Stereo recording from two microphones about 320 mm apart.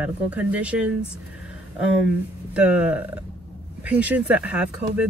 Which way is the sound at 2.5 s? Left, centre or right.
Centre.